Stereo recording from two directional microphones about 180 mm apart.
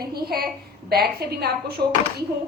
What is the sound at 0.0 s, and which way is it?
A woman's voice, 60° right (ahead or behind).